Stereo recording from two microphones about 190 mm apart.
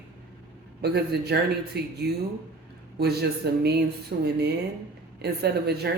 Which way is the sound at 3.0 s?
60° right (ahead or behind).